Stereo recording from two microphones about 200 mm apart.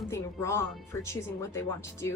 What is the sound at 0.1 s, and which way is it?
Speech, 15° left (ahead or behind).